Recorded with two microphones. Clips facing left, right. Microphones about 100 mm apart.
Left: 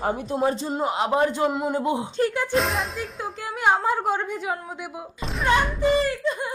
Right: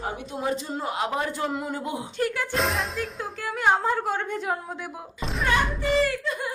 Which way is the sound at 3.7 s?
10° left (ahead or behind).